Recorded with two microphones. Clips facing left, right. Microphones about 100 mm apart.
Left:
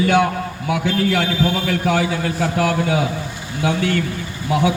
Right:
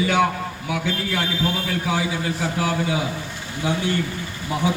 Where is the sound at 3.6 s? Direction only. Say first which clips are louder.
Left 4 dB; 75° left (ahead or behind).